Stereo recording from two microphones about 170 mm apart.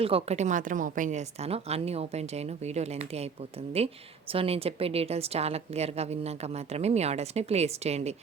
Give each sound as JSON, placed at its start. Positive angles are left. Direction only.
{"t": 0.0, "sound": "a woman's voice", "side_deg": -35}